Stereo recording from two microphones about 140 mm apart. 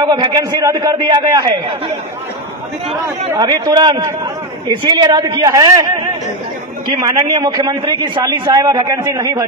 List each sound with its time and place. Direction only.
0.0 s a man's voice: 30° right (ahead or behind)
3.3 s a man's voice: 30° right (ahead or behind)
6.9 s a man's voice: 30° right (ahead or behind)